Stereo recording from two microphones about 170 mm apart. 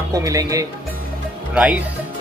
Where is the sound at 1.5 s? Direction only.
10° right (ahead or behind).